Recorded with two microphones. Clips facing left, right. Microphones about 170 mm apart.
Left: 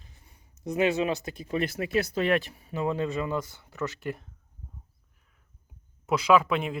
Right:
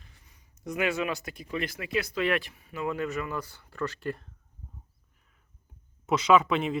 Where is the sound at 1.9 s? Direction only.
40° left (ahead or behind); by 4.2 s 15° left (ahead or behind).